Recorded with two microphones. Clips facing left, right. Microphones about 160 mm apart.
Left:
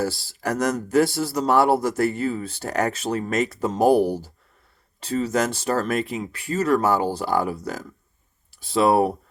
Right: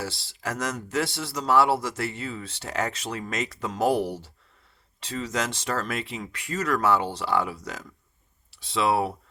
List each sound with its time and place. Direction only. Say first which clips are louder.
0.5 s a man's voice: left 9 dB; 35° left (ahead or behind)
3.0 s speech: left 8 dB; 35° left (ahead or behind)
3.2 s a man's voice: left 7 dB; 50° left (ahead or behind)
3.8 s speech: left 6 dB; 30° left (ahead or behind)
6.3 s speech: left 6 dB; 35° left (ahead or behind)
6.8 s a man's voice: left 3 dB; 40° left (ahead or behind)